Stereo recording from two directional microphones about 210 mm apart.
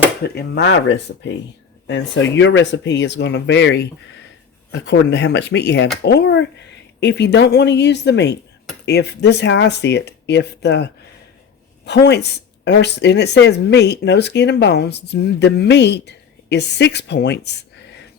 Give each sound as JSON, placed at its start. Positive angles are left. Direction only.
{"t": 0.3, "sound": "speech", "side_deg": 55}
{"t": 1.9, "sound": "speech", "side_deg": 60}
{"t": 4.9, "sound": "speech", "side_deg": 55}